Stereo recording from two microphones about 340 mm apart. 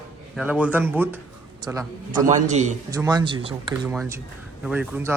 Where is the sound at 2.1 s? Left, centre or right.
Right; by 5.1 s centre.